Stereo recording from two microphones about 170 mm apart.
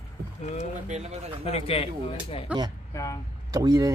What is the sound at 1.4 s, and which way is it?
Speech, 35° left (ahead or behind).